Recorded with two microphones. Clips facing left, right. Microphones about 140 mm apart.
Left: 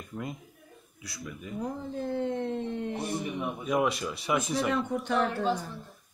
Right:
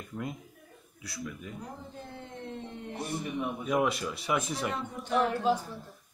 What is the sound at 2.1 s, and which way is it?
Speech, 90° left.